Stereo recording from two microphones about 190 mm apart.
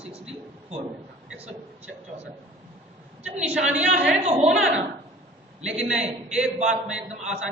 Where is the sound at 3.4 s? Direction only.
5° right (ahead or behind).